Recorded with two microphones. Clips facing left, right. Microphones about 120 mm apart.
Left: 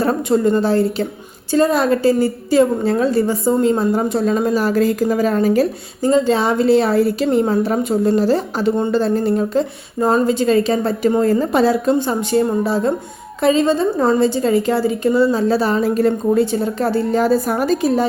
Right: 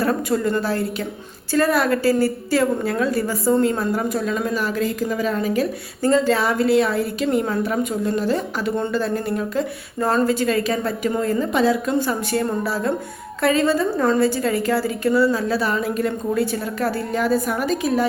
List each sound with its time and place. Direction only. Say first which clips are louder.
0.0 s a woman's voice: left 5 dB; 25° left (ahead or behind)
6.0 s a woman's voice: left 3 dB; 20° left (ahead or behind); by 11.9 s 35° left (ahead or behind)
11.9 s a woman's voice: left 4 dB; 25° left (ahead or behind)